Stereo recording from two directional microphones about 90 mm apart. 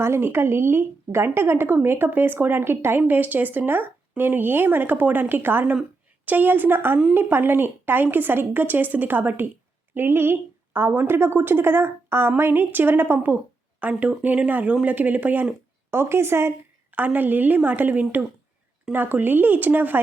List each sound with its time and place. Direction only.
0.0 s a woman's voice: 30° right (ahead or behind)